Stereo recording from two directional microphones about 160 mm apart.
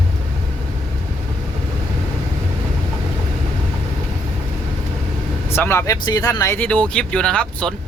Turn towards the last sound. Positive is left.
turn(degrees=5)  # may be behind; listen again after turning